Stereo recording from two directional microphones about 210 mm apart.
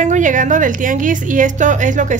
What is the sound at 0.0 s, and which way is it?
A woman's voice, 35° right (ahead or behind).